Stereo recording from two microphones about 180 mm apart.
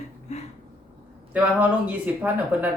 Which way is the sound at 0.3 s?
40° left (ahead or behind).